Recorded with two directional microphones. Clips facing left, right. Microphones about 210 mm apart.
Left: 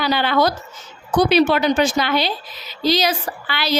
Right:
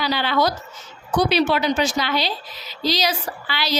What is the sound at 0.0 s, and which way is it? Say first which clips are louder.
A woman's voice: left 3 dB; 55° left (ahead or behind).